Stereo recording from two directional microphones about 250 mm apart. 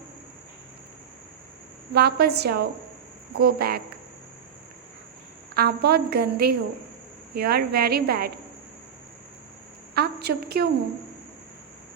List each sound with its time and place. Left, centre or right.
1.9 s a woman's voice: right
5.5 s a woman's voice: right
9.9 s a sound: right